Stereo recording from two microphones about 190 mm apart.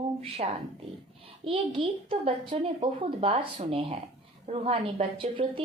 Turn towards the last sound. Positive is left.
turn(degrees=-25)  # may be behind; listen again after turning